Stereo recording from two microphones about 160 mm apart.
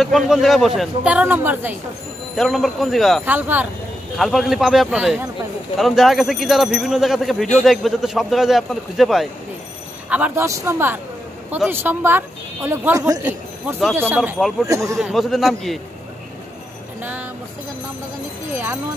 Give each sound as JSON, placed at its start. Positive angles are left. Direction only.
{"t": 0.0, "sound": "speech", "side_deg": 0}
{"t": 2.3, "sound": "speech", "side_deg": 0}
{"t": 3.3, "sound": "speech", "side_deg": -10}
{"t": 4.2, "sound": "a man's voice", "side_deg": 0}
{"t": 15.0, "sound": "speech", "side_deg": 0}
{"t": 17.0, "sound": "music", "side_deg": -10}